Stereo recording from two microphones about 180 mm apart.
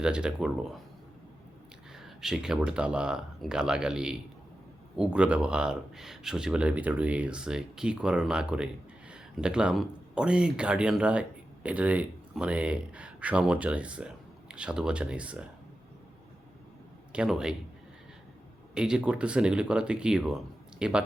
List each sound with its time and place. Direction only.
0.0 s speech: 5° right (ahead or behind)
2.0 s speech: centre (ahead or behind)
17.1 s a man's voice: 5° right (ahead or behind)
18.7 s speech: 5° right (ahead or behind)